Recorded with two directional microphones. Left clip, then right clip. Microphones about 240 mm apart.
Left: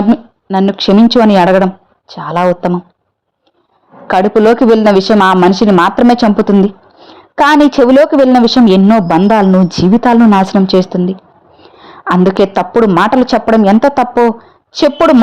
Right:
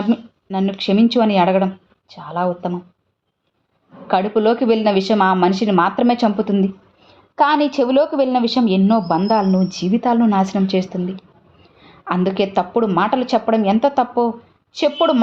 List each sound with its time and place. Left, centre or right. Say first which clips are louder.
0.1 s speech: left 9 dB; left
4.0 s a woman's voice: left 8 dB; left